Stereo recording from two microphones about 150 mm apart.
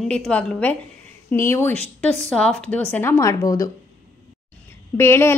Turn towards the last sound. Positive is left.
turn(degrees=15)  # may be behind; listen again after turning